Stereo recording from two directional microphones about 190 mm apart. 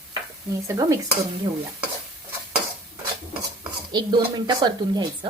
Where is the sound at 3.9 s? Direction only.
20° right (ahead or behind).